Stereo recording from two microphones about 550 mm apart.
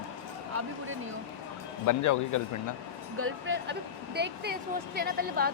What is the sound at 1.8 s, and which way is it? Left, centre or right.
Speech, left.